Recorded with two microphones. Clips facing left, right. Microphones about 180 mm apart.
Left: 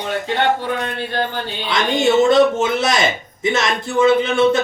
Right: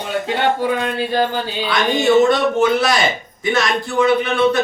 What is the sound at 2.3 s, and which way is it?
Speech, 20° left (ahead or behind).